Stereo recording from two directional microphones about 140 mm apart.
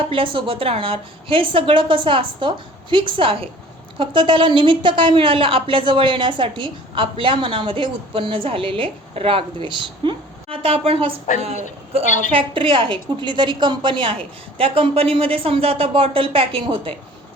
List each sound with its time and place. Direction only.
0.0 s a woman's voice: 40° right (ahead or behind)
12.0 s a woman's voice: 60° left (ahead or behind)
12.3 s a woman's voice: 40° right (ahead or behind)